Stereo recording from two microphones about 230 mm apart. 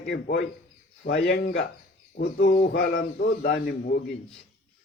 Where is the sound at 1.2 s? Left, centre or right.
Left.